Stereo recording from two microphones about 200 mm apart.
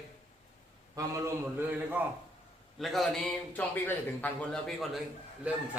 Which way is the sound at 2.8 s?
Centre (ahead or behind).